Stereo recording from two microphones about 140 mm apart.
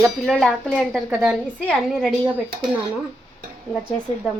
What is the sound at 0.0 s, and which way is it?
Speech, centre (ahead or behind).